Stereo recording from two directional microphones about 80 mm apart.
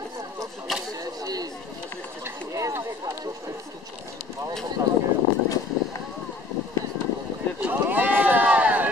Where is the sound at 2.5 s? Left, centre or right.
Right.